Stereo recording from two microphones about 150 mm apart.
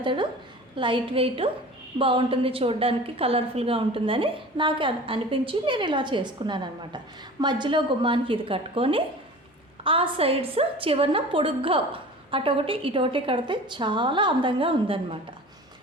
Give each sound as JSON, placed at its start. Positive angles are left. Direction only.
{"t": 0.0, "sound": "a woman's voice", "side_deg": -35}